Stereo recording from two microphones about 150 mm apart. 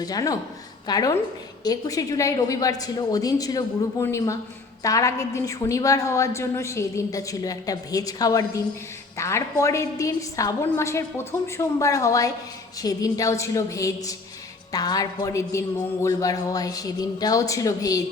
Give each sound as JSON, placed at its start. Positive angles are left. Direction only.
{"t": 0.0, "sound": "a woman's voice", "side_deg": 25}